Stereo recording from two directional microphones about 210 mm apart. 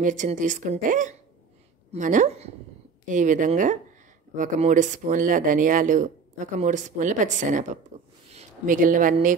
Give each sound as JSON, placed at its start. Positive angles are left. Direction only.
{"t": 0.0, "sound": "speech", "side_deg": -35}